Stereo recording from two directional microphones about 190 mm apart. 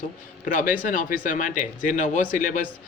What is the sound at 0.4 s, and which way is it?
Speech, 45° left (ahead or behind).